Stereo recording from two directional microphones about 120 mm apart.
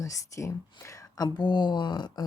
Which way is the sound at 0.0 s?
25° left (ahead or behind).